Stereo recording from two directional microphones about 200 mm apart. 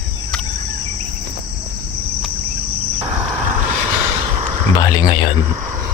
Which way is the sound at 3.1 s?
10° right (ahead or behind).